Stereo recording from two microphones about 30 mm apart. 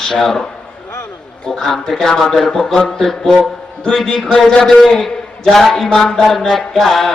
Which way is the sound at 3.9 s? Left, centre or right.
Centre.